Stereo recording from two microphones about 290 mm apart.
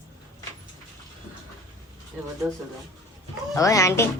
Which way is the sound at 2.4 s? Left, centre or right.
Centre.